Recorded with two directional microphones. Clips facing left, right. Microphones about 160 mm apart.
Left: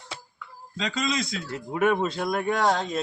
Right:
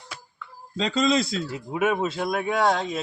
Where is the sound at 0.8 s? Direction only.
35° right (ahead or behind).